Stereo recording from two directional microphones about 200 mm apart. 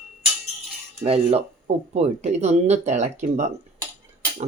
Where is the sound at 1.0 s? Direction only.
30° right (ahead or behind).